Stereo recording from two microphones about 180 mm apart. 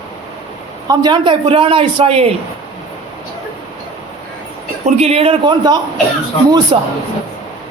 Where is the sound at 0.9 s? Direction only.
25° right (ahead or behind).